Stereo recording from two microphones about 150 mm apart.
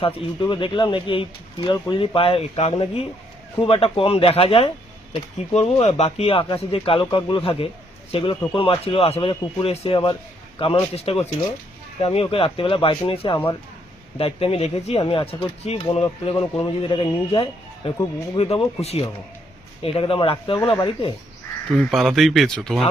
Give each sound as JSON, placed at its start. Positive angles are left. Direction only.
{"t": 0.0, "sound": "speech", "side_deg": 30}
{"t": 7.0, "sound": "speech", "side_deg": 30}
{"t": 21.7, "sound": "speech", "side_deg": 0}